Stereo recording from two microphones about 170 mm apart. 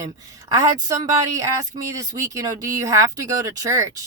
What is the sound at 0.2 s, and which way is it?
Speech, 20° right (ahead or behind).